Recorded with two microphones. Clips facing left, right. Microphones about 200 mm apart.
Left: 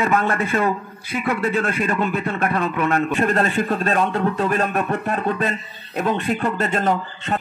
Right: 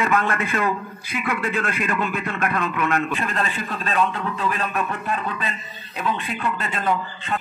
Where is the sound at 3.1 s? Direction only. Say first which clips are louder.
Left 7 dB; 45° left (ahead or behind).